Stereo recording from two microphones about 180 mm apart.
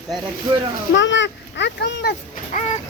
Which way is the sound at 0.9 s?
90° left.